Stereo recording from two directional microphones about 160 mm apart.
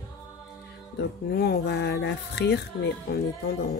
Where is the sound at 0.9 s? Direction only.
80° left.